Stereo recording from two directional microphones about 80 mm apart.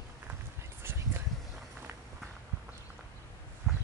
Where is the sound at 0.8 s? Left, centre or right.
Right.